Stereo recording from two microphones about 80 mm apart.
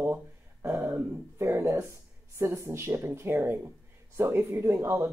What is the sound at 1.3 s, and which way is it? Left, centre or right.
Speech, right.